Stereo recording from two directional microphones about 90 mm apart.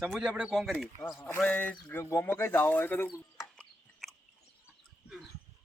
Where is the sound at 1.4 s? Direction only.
15° left (ahead or behind).